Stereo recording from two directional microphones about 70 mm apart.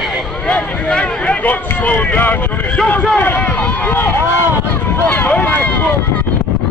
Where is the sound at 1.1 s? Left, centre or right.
Centre.